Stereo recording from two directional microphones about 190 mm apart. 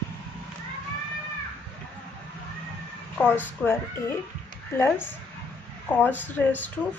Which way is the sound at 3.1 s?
10° left (ahead or behind).